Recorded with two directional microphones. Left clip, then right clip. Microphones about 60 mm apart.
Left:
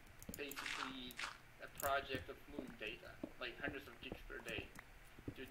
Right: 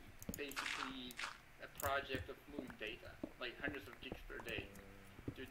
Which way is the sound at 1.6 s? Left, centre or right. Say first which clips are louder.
Left 1 dB; right.